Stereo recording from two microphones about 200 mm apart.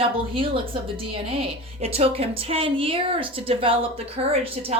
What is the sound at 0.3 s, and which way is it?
A woman's voice, 25° right (ahead or behind).